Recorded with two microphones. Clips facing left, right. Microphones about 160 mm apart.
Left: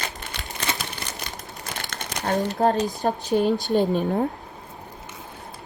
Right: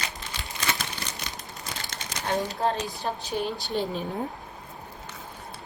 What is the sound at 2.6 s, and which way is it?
Speech, 40° left (ahead or behind).